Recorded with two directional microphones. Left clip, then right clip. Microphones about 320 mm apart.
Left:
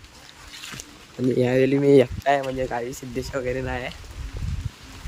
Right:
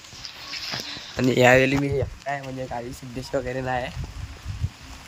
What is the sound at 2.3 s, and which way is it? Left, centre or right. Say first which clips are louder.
Speech: left 8 dB; centre.